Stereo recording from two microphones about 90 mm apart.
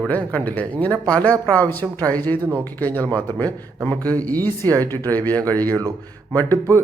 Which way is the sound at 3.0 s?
55° right (ahead or behind).